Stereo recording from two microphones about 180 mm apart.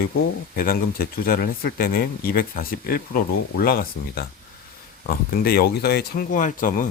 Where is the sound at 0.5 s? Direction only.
55° left (ahead or behind).